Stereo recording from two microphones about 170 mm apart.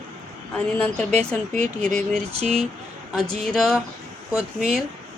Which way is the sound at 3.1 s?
Centre (ahead or behind).